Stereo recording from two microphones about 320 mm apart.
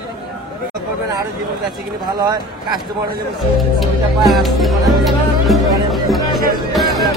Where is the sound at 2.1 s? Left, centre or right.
Centre.